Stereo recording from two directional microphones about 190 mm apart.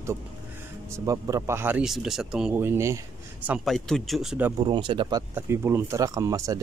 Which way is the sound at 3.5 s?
Centre (ahead or behind).